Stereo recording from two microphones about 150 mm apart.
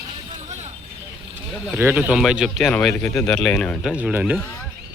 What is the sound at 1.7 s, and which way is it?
Speech, 15° right (ahead or behind).